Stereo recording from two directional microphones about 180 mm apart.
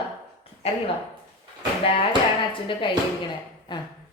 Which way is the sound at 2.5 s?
30° left (ahead or behind).